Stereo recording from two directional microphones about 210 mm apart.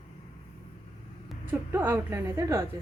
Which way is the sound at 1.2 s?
10° right (ahead or behind).